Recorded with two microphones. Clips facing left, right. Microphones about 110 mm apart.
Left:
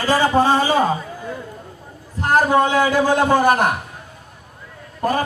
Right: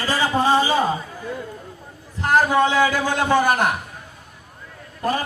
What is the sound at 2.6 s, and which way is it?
Speech, 50° left (ahead or behind).